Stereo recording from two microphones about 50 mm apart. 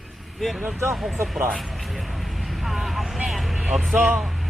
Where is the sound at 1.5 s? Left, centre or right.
Centre.